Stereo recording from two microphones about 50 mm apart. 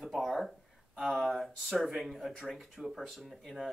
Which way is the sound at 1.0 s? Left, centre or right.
Centre.